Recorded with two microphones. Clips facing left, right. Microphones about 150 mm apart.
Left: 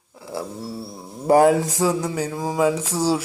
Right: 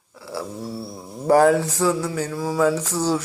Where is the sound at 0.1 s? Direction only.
20° left (ahead or behind).